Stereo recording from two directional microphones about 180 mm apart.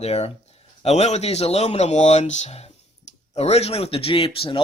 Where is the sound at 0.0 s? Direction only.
35° left (ahead or behind).